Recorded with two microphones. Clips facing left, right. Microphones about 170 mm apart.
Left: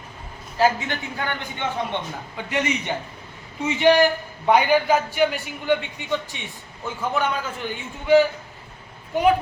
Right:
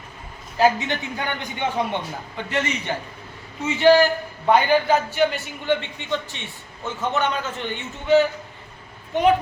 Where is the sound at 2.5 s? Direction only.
15° left (ahead or behind).